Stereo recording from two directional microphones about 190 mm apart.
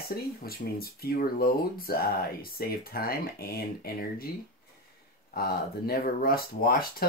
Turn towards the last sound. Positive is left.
turn(degrees=50)  # may be behind; listen again after turning